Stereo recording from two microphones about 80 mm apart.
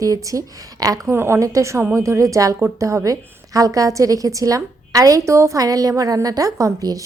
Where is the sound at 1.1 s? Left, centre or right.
Right.